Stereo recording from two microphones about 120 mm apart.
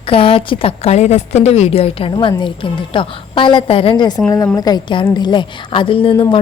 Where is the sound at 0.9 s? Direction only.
65° left (ahead or behind).